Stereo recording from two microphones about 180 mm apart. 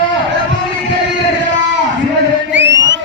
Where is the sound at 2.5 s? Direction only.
90° right.